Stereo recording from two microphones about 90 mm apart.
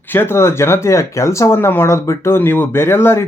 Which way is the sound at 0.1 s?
25° left (ahead or behind).